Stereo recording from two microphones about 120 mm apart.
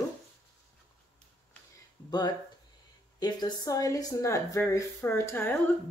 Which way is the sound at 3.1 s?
35° left (ahead or behind).